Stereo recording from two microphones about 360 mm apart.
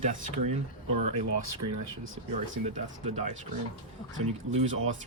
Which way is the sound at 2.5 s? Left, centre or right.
Centre.